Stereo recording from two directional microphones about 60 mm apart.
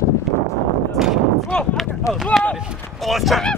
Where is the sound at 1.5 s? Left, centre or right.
Centre.